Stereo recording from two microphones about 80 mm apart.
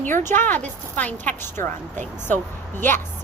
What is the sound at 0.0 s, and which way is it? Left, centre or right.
Speech, left.